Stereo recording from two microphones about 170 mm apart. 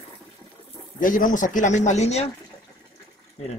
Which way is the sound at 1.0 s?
55° left (ahead or behind).